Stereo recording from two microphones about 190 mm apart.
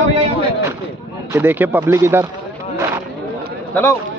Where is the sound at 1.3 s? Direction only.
10° right (ahead or behind).